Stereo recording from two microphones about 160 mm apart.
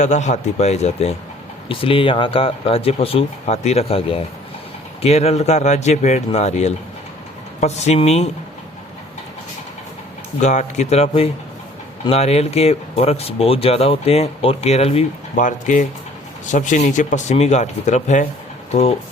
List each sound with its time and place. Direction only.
0.0 s speech: 45° left (ahead or behind)
10.4 s speech: 50° left (ahead or behind)